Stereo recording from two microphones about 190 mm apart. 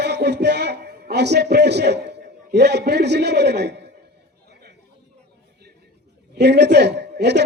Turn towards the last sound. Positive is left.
turn(degrees=-65)  # may be behind; listen again after turning